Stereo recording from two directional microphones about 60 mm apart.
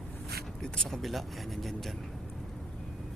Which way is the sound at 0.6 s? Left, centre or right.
Centre.